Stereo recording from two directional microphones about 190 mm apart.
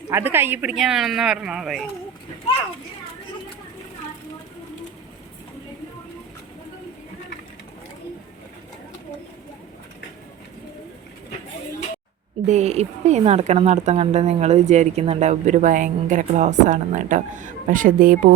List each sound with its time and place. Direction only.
0.1 s speech: 10° right (ahead or behind)
12.5 s a woman's voice: 35° right (ahead or behind)